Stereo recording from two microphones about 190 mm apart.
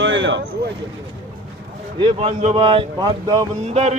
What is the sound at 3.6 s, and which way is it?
Speech, 35° right (ahead or behind).